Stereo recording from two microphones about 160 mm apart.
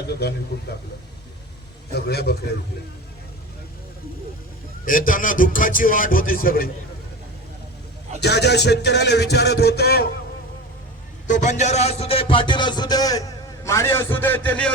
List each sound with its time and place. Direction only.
0.1 s a man's voice: 85° left
1.9 s a man's voice: 85° left
4.9 s music: 60° left (ahead or behind)
8.2 s a man's voice: 90° left
11.3 s a man's voice: 50° left (ahead or behind); by 14.7 s 10° left (ahead or behind)